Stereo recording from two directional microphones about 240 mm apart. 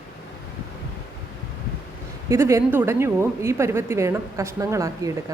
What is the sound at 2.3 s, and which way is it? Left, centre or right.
A woman's voice, centre.